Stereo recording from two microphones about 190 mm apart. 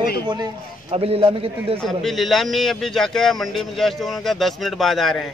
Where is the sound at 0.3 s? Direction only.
25° right (ahead or behind).